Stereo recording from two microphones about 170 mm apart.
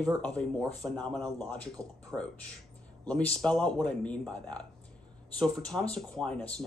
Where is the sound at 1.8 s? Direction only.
20° right (ahead or behind).